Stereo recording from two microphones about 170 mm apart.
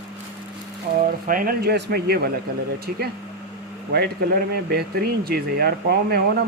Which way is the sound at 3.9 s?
70° right (ahead or behind).